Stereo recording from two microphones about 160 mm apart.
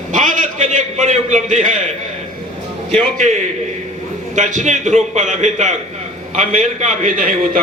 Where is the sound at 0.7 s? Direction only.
50° right (ahead or behind).